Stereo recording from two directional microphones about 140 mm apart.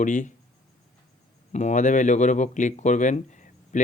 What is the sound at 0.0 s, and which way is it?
Speech, 65° left (ahead or behind).